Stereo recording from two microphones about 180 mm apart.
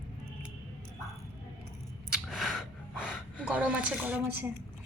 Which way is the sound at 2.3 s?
Centre (ahead or behind).